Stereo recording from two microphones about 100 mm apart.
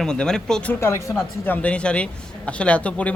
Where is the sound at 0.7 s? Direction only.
25° left (ahead or behind).